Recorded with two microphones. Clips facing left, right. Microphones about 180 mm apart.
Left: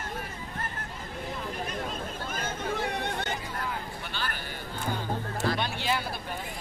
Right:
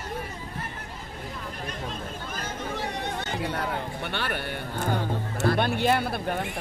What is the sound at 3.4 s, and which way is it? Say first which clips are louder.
A man's voice: right 6 dB; 75° right (ahead or behind).